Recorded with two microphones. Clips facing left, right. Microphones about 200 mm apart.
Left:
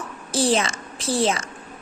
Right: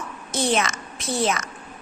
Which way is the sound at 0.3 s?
30° left (ahead or behind).